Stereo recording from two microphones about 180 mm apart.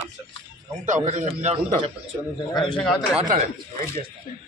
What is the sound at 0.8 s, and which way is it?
A man's voice, 40° right (ahead or behind).